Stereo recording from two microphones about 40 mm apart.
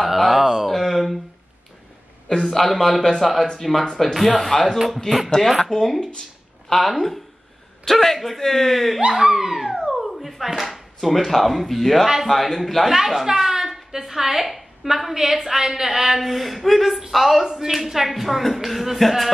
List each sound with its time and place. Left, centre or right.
0.0 s a sound: centre
2.2 s a man's voice: centre
2.5 s a woman's voice: centre
9.0 s speech: right
9.3 s dog: centre
9.8 s a woman's voice: centre
13.0 s a woman's voice: centre